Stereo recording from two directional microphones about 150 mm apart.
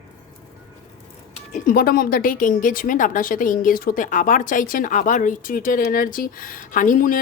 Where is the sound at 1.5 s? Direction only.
75° left (ahead or behind).